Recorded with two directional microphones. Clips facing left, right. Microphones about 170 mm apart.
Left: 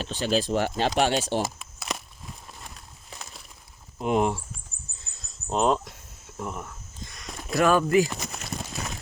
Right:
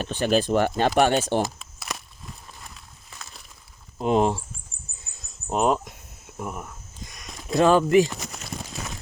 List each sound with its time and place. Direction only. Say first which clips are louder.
0.0 s speech: right 3 dB; 55° right (ahead or behind)
1.4 s crumpling: right 3 dB; 5° left (ahead or behind)
3.9 s speech: right 3 dB; 30° right (ahead or behind)
5.1 s a sound: right 1 dB; 15° right (ahead or behind)
5.5 s speech: right 1 dB; 10° right (ahead or behind)
7.1 s walk: right 3 dB; 20° right (ahead or behind)